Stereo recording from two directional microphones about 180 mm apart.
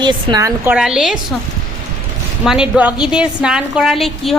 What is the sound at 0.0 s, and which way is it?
Speech, 25° right (ahead or behind).